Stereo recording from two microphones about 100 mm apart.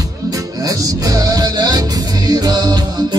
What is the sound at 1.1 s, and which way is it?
Music, 35° right (ahead or behind).